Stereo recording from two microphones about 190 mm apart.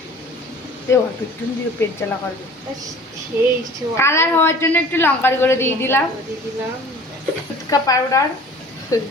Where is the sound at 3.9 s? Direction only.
15° left (ahead or behind).